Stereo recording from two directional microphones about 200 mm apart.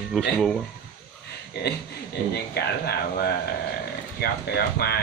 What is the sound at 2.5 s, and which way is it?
Speech, 50° left (ahead or behind).